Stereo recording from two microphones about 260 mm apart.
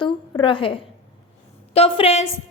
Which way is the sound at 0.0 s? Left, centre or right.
Centre.